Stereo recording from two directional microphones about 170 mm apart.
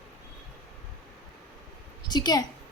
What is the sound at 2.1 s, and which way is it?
Speech, 25° left (ahead or behind).